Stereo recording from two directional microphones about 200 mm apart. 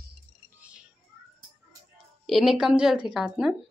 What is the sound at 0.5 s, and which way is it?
Music, 5° right (ahead or behind).